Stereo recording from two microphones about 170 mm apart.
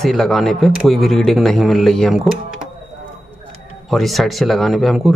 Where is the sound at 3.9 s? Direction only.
Centre (ahead or behind).